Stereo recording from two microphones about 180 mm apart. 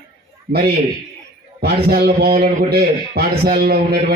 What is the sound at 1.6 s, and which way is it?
A man's voice, 60° right (ahead or behind).